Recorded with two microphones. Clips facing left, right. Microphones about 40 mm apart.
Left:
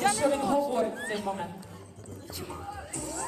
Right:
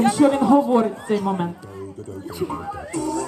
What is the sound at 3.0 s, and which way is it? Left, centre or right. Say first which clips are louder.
Speech: right 15 dB; right.